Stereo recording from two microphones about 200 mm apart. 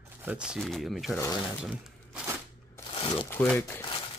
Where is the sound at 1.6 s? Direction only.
5° right (ahead or behind).